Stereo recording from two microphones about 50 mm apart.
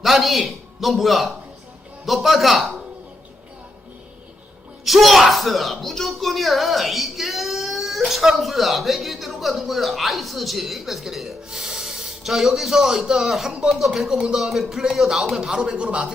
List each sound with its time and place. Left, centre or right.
0.0 s a man's voice: centre
4.9 s a man's voice: centre
15.8 s speech: right